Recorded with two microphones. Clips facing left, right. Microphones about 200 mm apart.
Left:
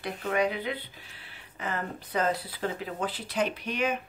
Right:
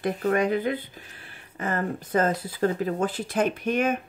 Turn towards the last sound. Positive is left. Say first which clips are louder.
# right 6 dB
turn(degrees=-50)  # may be behind; listen again after turning